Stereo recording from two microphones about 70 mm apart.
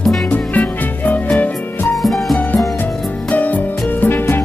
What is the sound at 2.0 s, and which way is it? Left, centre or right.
Music, centre.